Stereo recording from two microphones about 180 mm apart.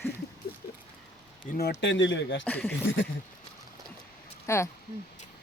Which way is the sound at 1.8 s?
90° left.